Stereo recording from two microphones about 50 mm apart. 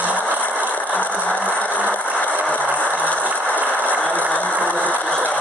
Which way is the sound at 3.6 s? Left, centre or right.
Left.